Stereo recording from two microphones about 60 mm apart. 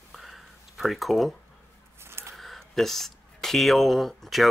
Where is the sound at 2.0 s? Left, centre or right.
Right.